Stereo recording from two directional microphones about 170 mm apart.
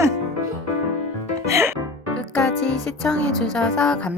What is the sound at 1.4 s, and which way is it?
Music, 15° right (ahead or behind).